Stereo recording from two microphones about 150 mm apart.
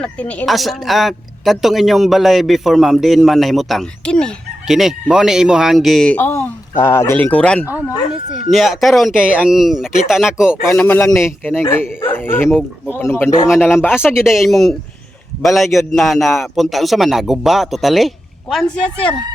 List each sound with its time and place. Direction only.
0.0 s speech: 10° left (ahead or behind)
7.6 s speech: 10° right (ahead or behind)
8.4 s speech: centre (ahead or behind)
10.7 s speech: 15° left (ahead or behind)
13.9 s speech: 5° right (ahead or behind)